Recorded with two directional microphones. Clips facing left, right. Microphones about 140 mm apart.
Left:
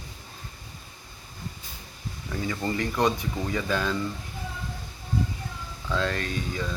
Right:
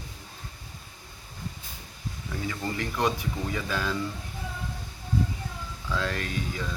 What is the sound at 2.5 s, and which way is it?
Speech, centre (ahead or behind).